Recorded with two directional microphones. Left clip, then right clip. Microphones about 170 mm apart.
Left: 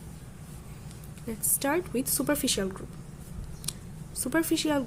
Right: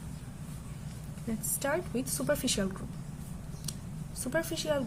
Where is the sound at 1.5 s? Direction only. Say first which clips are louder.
Left 4 dB; 35° left (ahead or behind).